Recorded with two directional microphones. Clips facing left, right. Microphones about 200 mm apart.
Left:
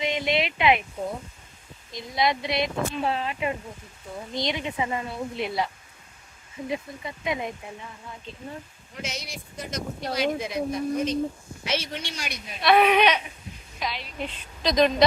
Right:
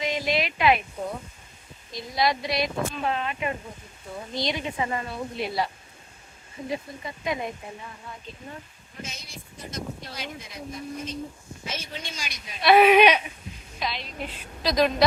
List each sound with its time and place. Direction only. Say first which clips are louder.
0.0 s a sound: left 1 dB; 25° left (ahead or behind)
1.9 s speech: even; 20° left (ahead or behind)
6.7 s speech: even; 20° left (ahead or behind)
9.0 s speech: left 5 dB; 85° left; by 12.4 s 65° left (ahead or behind)
12.6 s speech: right 3 dB; 5° right (ahead or behind)
13.7 s a woman's voice: even; 10° left (ahead or behind)
14.2 s a woman's voice: left 1 dB; 5° right (ahead or behind)